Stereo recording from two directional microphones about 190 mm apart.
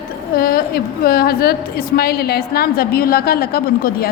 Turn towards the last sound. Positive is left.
turn(degrees=50)  # may be behind; listen again after turning